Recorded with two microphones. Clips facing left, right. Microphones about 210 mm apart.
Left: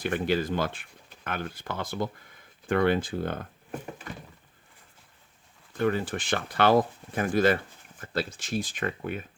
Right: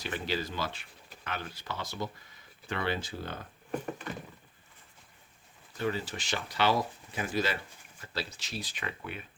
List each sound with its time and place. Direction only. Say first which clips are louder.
0.0 s speech: left 8 dB; 55° left (ahead or behind)
5.7 s speech: left 6 dB; 55° left (ahead or behind)